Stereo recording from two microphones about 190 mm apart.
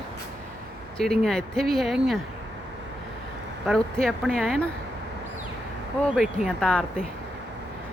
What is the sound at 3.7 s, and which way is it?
Speech, 5° left (ahead or behind).